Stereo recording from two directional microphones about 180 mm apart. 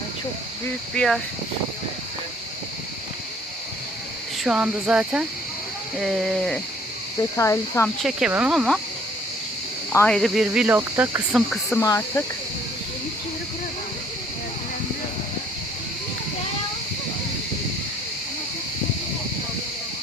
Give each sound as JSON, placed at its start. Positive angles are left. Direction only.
{"t": 0.9, "sound": "speech", "side_deg": 0}
{"t": 4.4, "sound": "speech", "side_deg": -5}
{"t": 7.3, "sound": "speech", "side_deg": 15}
{"t": 8.0, "sound": "speech", "side_deg": -5}
{"t": 9.9, "sound": "speech", "side_deg": 15}
{"t": 10.2, "sound": "speech", "side_deg": 0}
{"t": 11.3, "sound": "speech", "side_deg": 0}
{"t": 11.8, "sound": "speech", "side_deg": 15}